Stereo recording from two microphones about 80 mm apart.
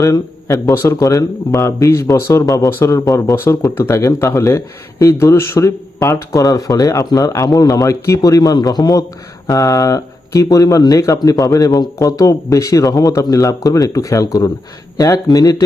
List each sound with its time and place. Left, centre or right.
0.0 s speech: left
2.6 s speech: left
6.4 s speech: left
7.9 s speech: left